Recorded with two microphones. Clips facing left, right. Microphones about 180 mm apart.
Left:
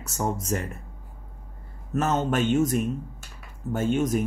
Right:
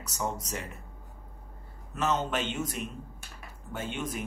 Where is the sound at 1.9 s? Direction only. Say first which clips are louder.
Left 5 dB; 45° left (ahead or behind).